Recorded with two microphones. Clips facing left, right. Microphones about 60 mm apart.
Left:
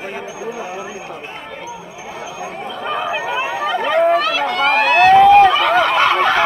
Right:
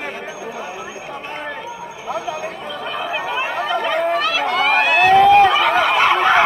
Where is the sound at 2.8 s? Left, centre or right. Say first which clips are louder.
Left 3 dB; centre.